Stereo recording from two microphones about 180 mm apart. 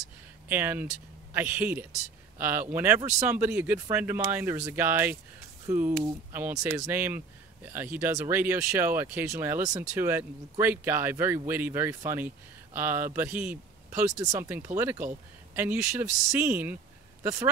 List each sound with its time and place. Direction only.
0.5 s speech: 10° right (ahead or behind)